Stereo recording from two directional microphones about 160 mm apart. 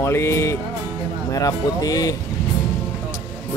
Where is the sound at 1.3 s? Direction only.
20° left (ahead or behind).